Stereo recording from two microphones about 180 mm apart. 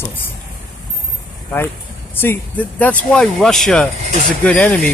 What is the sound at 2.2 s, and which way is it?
Speech, 10° left (ahead or behind).